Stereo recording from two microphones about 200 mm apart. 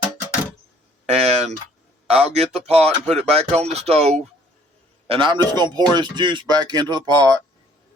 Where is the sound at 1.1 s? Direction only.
35° right (ahead or behind).